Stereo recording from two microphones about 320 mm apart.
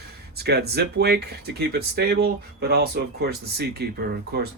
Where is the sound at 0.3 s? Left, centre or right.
Right.